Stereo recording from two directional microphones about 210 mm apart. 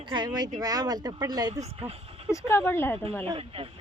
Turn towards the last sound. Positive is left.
turn(degrees=-25)  # may be behind; listen again after turning